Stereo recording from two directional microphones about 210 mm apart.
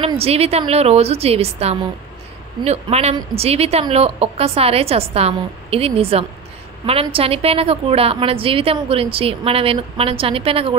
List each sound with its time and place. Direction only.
0.0 s a woman's voice: 25° right (ahead or behind)